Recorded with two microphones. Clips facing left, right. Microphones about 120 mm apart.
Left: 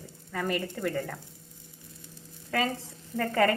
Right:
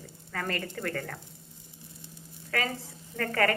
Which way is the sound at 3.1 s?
20° left (ahead or behind).